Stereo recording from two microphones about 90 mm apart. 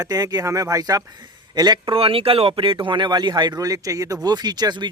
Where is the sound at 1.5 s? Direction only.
50° right (ahead or behind).